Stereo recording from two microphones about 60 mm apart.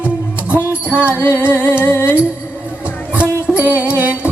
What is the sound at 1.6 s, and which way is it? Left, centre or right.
Music, left.